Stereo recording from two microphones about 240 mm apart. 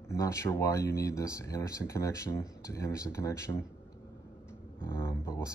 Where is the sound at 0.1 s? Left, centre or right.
Centre.